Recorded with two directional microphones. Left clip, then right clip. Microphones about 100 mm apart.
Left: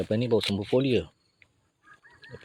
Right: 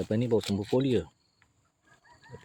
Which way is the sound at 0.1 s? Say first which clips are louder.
Left 2 dB; 5° right (ahead or behind).